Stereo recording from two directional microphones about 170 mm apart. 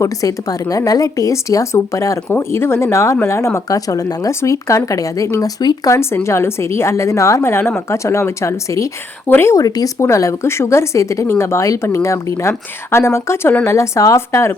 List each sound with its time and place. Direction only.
0.0 s speech: 20° left (ahead or behind)